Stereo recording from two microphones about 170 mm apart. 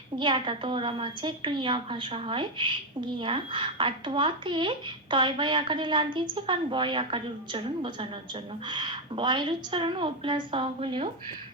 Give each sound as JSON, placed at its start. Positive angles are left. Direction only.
{"t": 0.2, "sound": "a woman's voice", "side_deg": -30}